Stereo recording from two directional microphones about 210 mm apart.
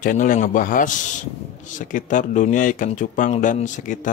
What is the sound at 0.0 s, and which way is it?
Speech, 40° left (ahead or behind).